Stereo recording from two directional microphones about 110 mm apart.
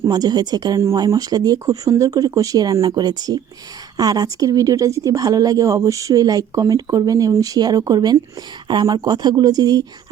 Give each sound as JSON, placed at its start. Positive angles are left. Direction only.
{"t": 0.0, "sound": "a woman's voice", "side_deg": -35}